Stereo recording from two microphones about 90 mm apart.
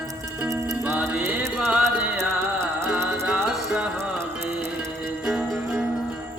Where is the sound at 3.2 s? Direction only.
5° right (ahead or behind).